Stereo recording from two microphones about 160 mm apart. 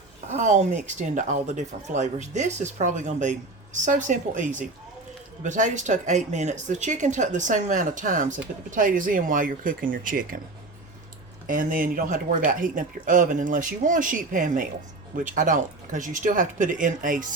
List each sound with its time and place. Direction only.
0.3 s speech: 45° right (ahead or behind)
11.4 s speech: 60° right (ahead or behind)